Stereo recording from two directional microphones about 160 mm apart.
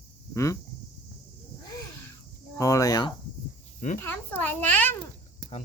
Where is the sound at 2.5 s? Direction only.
20° left (ahead or behind).